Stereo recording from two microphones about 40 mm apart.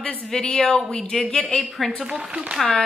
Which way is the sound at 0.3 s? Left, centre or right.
Centre.